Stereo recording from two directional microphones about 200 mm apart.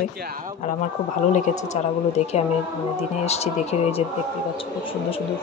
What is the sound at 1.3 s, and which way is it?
Speech, 35° left (ahead or behind).